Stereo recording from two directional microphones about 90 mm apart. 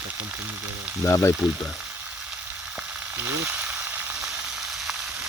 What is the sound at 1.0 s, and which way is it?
Speech, 30° left (ahead or behind).